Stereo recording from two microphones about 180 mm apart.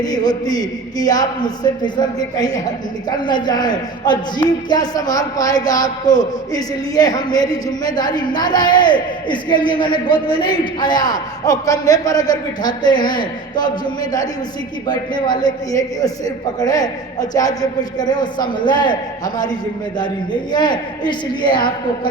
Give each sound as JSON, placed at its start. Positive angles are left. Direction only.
{"t": 0.0, "sound": "speech", "side_deg": 20}